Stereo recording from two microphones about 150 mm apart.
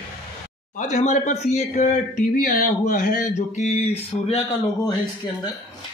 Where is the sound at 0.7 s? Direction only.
50° left (ahead or behind).